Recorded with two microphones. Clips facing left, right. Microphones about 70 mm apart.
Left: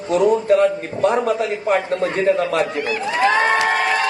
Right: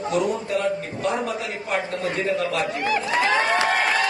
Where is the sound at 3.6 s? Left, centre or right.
Left.